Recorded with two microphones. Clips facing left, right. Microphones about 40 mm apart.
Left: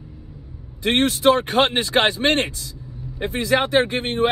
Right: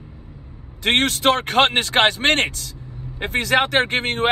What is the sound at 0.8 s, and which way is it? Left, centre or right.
Speech, right.